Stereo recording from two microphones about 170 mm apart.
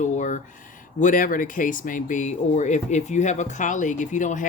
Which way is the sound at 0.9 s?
50° left (ahead or behind).